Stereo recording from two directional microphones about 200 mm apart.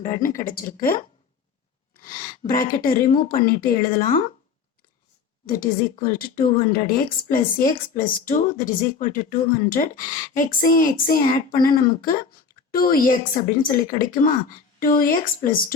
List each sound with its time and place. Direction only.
0.0 s a woman's voice: 40° left (ahead or behind)
2.0 s a sound: 45° left (ahead or behind)
2.8 s a woman's voice: 45° left (ahead or behind)
5.5 s a woman's voice: 45° left (ahead or behind)